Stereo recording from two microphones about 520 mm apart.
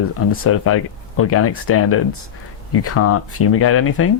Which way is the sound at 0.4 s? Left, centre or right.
Left.